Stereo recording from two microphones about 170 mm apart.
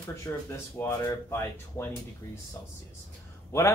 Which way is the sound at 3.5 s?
15° left (ahead or behind).